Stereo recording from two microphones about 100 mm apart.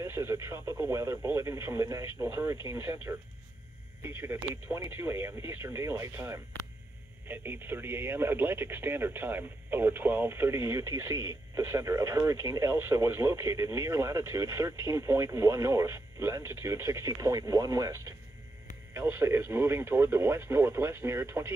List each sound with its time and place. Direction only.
0.0 s speech: 25° right (ahead or behind)
17.1 s speech: 40° right (ahead or behind)